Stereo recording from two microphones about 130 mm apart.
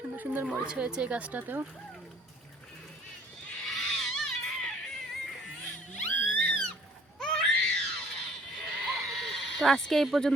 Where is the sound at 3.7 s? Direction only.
Centre (ahead or behind).